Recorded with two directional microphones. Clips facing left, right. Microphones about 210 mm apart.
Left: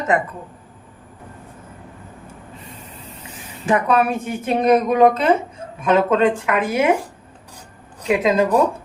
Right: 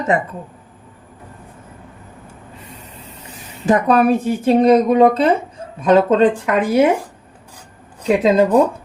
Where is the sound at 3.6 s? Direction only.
35° right (ahead or behind).